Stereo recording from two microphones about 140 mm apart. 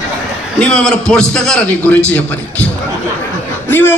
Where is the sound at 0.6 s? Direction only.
5° left (ahead or behind).